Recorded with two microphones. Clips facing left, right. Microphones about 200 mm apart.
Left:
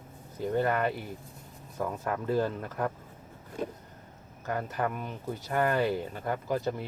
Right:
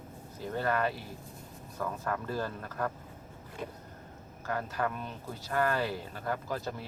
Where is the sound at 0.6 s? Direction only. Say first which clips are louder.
Left 2 dB; 20° left (ahead or behind).